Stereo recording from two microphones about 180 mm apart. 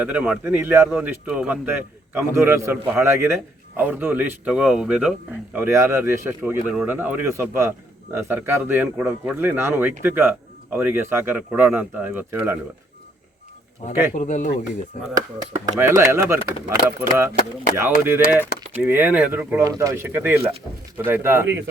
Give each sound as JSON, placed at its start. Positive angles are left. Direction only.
{"t": 0.0, "sound": "a man's voice", "side_deg": -5}
{"t": 14.1, "sound": "speech", "side_deg": 40}
{"t": 16.0, "sound": "a man's voice", "side_deg": -15}